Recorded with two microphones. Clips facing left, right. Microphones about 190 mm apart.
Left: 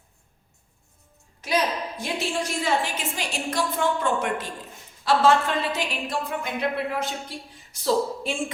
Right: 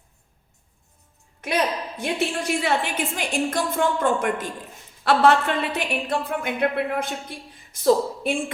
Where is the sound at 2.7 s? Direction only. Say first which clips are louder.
Right 2 dB; 60° right (ahead or behind).